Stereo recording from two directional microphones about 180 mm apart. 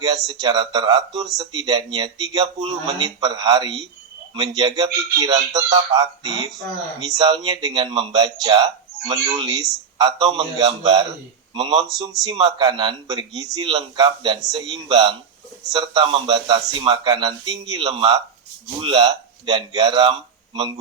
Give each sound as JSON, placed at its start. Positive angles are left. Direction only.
{"t": 0.3, "sound": "speech", "side_deg": -25}